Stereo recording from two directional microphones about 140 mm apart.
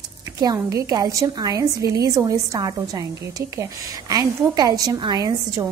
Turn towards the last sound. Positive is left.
turn(degrees=-25)  # may be behind; listen again after turning